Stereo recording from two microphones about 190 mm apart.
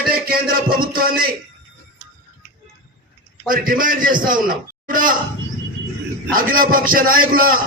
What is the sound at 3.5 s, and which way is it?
A man's voice, 45° right (ahead or behind).